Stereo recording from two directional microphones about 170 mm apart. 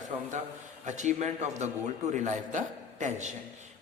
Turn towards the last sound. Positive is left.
turn(degrees=-45)  # may be behind; listen again after turning